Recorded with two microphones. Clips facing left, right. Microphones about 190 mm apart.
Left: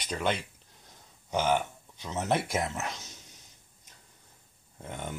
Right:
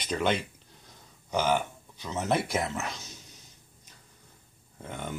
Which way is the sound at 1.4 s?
5° right (ahead or behind).